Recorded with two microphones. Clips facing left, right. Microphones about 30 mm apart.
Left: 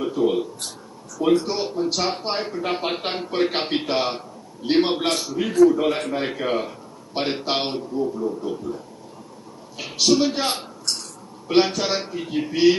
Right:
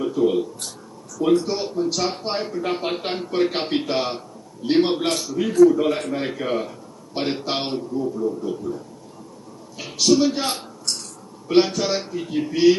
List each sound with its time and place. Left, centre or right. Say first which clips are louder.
0.0 s speech: right 1 dB; centre